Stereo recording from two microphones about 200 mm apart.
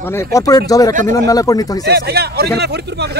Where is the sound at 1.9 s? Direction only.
55° right (ahead or behind).